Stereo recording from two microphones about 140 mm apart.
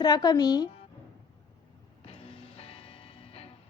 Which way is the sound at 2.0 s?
45° left (ahead or behind).